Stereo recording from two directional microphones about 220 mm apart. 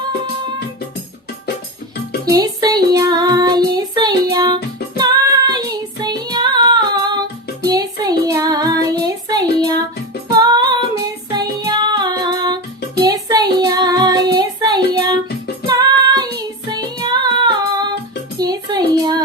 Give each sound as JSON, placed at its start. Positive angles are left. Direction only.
{"t": 2.3, "sound": "child singing", "side_deg": -15}
{"t": 10.4, "sound": "female singing", "side_deg": -20}
{"t": 11.3, "sound": "music", "side_deg": -20}
{"t": 13.0, "sound": "child singing", "side_deg": -15}
{"t": 15.6, "sound": "music", "side_deg": -20}
{"t": 18.3, "sound": "child singing", "side_deg": -20}